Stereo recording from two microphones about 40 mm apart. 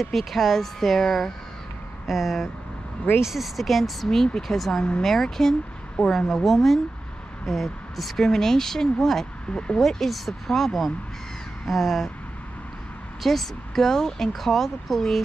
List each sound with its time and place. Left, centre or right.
0.0 s speech: centre
6.4 s speech: centre
9.5 s speech: left
9.8 s speech: centre
13.2 s speech: centre